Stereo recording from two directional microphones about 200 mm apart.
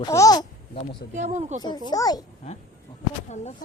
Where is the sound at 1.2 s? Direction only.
35° right (ahead or behind).